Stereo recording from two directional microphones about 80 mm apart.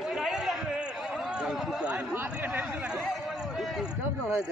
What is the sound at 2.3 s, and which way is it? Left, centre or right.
Speech, right.